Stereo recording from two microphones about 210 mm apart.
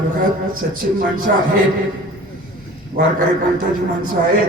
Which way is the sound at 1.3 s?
45° right (ahead or behind).